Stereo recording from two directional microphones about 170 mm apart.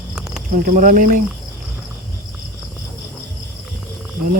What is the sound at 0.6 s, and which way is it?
Speech, 50° right (ahead or behind).